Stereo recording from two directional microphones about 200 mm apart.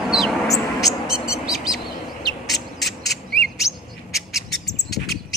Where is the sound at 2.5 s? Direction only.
Centre (ahead or behind).